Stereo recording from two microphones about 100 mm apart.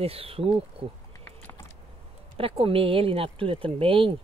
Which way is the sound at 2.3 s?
70° right (ahead or behind).